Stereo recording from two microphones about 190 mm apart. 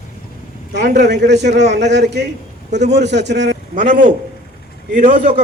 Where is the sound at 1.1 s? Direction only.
60° right (ahead or behind).